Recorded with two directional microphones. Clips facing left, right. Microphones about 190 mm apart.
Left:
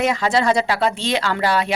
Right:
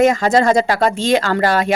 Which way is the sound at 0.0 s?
45° right (ahead or behind).